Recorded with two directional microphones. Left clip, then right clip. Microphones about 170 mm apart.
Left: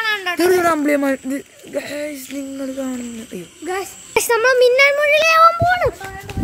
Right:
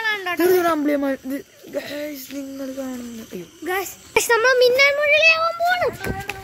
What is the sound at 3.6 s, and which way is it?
A child's voice, 5° right (ahead or behind).